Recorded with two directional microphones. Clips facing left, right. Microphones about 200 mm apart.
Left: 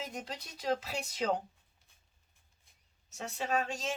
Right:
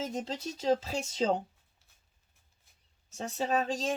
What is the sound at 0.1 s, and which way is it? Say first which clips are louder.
Speech: right 7 dB; 25° right (ahead or behind).